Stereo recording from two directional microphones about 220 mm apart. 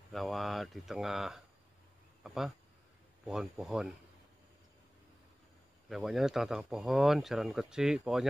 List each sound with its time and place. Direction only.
0.1 s speech: centre (ahead or behind)
5.9 s speech: centre (ahead or behind)